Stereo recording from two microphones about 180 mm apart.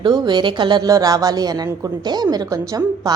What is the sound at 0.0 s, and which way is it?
Speech, 25° right (ahead or behind).